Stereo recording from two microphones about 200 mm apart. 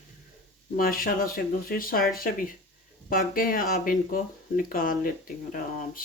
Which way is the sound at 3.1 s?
45° left (ahead or behind).